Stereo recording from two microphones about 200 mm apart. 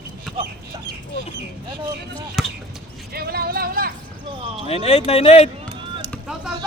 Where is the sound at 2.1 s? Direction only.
Centre (ahead or behind).